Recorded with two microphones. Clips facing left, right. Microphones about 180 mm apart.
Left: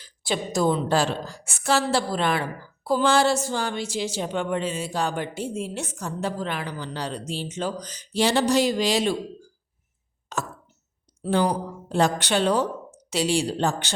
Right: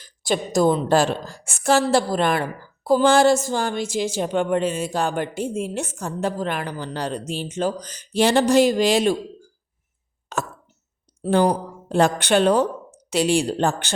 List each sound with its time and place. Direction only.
0.0 s a woman's voice: 45° right (ahead or behind)
10.3 s a sound: 60° right (ahead or behind)
11.2 s a woman's voice: 50° right (ahead or behind)